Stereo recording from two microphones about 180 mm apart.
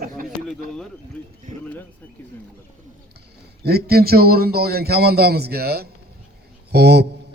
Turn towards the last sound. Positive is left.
turn(degrees=-65)  # may be behind; listen again after turning